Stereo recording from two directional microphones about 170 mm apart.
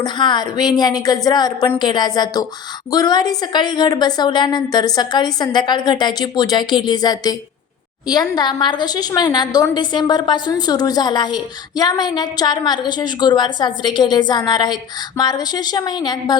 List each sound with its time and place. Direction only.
0.0 s a woman's voice: 25° left (ahead or behind)